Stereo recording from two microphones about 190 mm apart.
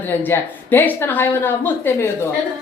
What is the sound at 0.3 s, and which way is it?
A woman's voice, 10° left (ahead or behind).